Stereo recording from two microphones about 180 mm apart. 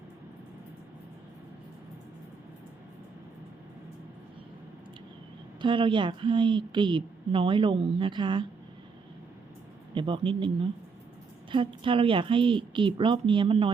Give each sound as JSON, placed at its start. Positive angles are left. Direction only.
{"t": 5.6, "sound": "a woman's voice", "side_deg": -25}
{"t": 9.9, "sound": "a woman's voice", "side_deg": -25}